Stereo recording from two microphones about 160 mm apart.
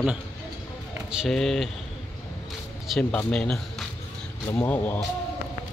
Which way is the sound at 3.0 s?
10° left (ahead or behind).